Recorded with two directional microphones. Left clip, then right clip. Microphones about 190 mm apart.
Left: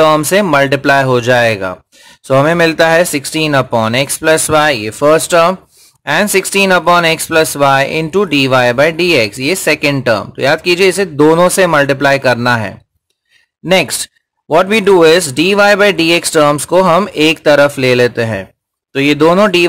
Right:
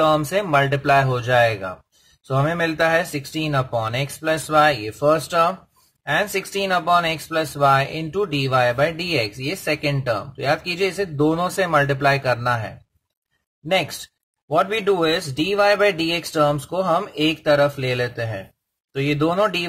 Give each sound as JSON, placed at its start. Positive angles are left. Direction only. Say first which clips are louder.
{"t": 0.0, "sound": "speech", "louder": "left 9 dB", "side_deg": 40}
{"t": 14.5, "sound": "speech", "louder": "left 10 dB", "side_deg": 40}